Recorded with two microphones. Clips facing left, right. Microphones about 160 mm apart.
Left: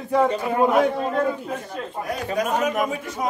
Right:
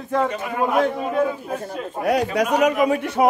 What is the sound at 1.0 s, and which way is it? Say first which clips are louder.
Speech: right 2 dB; 10° right (ahead or behind).